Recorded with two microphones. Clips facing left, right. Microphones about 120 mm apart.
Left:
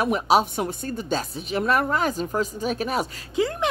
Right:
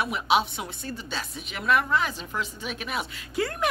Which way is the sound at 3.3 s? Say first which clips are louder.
Left 3 dB; 20° left (ahead or behind).